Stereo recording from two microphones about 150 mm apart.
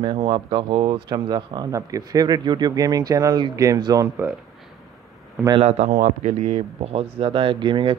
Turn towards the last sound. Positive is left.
turn(degrees=-30)  # may be behind; listen again after turning